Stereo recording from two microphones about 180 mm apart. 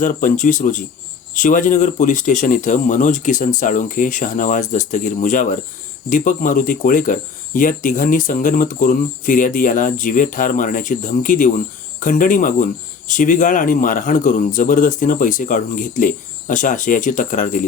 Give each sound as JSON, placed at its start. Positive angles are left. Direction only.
{"t": 0.0, "sound": "speech", "side_deg": 45}